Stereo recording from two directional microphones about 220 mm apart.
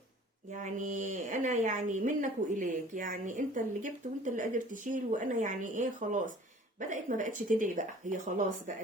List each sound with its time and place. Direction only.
0.5 s a woman's voice: 35° right (ahead or behind)